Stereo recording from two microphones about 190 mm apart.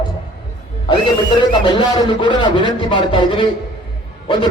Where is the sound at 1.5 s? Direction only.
25° left (ahead or behind).